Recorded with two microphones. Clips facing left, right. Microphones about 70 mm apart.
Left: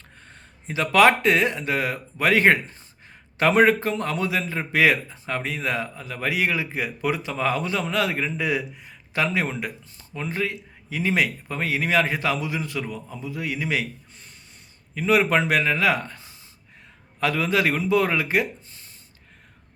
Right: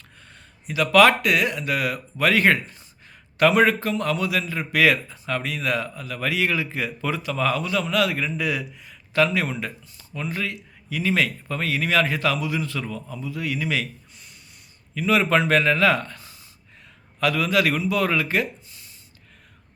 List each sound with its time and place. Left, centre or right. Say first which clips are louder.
0.3 s a man's voice: right 2 dB; left
14.9 s a man's voice: even; left